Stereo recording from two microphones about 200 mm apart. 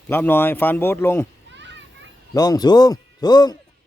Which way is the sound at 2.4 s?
20° left (ahead or behind).